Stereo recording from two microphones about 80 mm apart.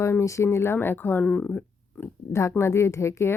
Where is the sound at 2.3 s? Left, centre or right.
Left.